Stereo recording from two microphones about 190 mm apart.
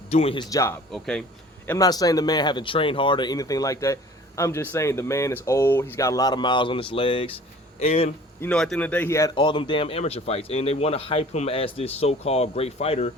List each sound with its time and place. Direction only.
0.1 s speech: 30° left (ahead or behind)
0.5 s speech: 15° left (ahead or behind)
0.9 s speech: 5° left (ahead or behind)
1.6 s speech: 15° left (ahead or behind)
8.4 s speech: 5° left (ahead or behind)
9.3 s speech: 25° left (ahead or behind)